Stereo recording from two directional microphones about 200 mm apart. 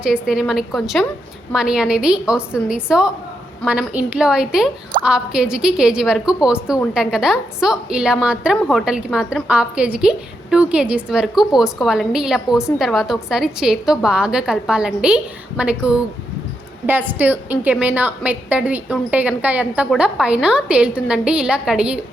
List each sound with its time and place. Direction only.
0.0 s a woman's voice: 5° right (ahead or behind)